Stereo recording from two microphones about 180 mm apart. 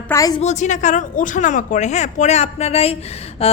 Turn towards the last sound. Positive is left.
turn(degrees=35)  # may be behind; listen again after turning